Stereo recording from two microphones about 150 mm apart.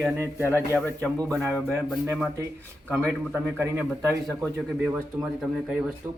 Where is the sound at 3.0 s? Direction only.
15° right (ahead or behind).